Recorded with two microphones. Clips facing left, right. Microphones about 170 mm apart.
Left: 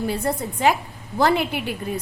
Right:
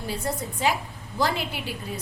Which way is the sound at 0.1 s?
60° left (ahead or behind).